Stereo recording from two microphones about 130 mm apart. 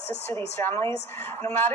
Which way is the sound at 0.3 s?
15° left (ahead or behind).